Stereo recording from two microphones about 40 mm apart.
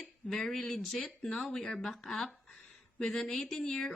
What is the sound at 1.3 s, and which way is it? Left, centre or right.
Speech, centre.